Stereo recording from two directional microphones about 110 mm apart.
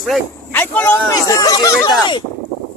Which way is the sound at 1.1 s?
35° left (ahead or behind).